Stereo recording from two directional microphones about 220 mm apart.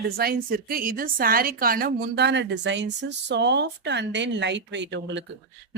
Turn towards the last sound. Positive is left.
turn(degrees=-55)  # may be behind; listen again after turning